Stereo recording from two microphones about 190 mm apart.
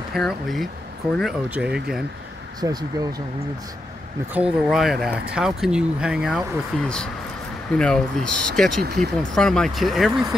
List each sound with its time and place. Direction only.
0.1 s speech: centre (ahead or behind)
2.6 s speech: 20° right (ahead or behind)
4.3 s speech: 5° right (ahead or behind)